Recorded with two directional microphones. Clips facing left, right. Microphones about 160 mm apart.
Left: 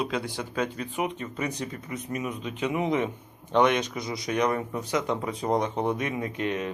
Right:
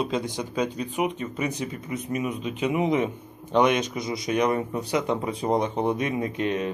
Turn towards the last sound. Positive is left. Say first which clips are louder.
# right 3 dB
turn(degrees=-25)  # may be behind; listen again after turning